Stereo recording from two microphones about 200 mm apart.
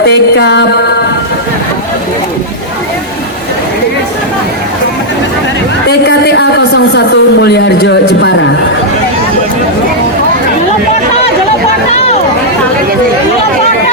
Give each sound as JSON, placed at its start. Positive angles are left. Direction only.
{"t": 0.0, "sound": "music", "side_deg": 55}
{"t": 5.9, "sound": "speech", "side_deg": 60}